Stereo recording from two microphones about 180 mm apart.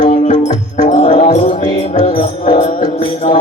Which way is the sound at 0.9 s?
40° left (ahead or behind).